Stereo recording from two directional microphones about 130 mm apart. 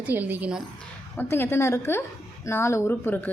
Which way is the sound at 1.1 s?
15° left (ahead or behind).